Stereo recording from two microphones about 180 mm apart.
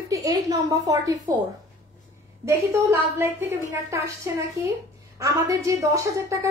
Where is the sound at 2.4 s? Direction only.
15° right (ahead or behind).